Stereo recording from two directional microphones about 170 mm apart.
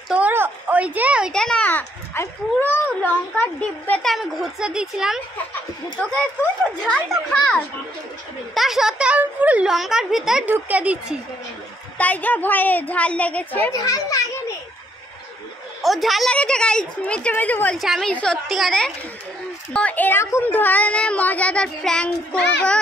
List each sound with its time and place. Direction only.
0.1 s a woman's voice: 10° right (ahead or behind)
1.3 s a child's voice: 5° left (ahead or behind)
6.8 s a child's voice: 5° left (ahead or behind)
12.0 s a woman's voice: 10° left (ahead or behind)
15.8 s a child's voice: centre (ahead or behind)